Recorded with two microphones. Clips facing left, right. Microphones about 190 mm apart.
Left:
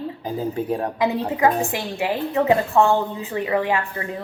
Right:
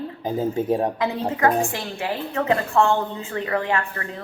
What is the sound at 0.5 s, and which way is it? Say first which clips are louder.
Speech: right 3 dB; 20° right (ahead or behind).